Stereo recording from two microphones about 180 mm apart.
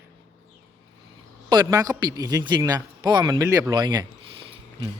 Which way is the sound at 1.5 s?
20° right (ahead or behind).